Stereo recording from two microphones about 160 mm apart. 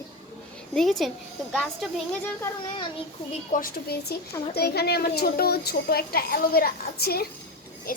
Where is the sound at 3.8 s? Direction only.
80° left.